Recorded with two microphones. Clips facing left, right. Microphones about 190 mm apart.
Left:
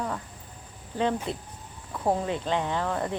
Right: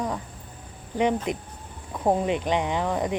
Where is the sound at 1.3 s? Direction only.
15° right (ahead or behind).